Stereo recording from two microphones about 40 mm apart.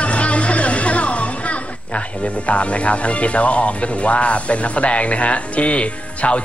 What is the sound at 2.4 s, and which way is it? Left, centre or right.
Speech, left.